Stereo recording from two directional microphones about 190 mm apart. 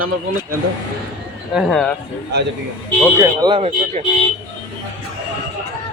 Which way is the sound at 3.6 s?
35° right (ahead or behind).